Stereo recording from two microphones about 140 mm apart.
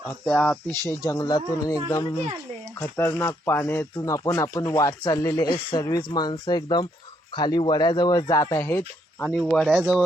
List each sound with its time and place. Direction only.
0.3 s speech: 15° left (ahead or behind)
9.2 s speech: 5° left (ahead or behind)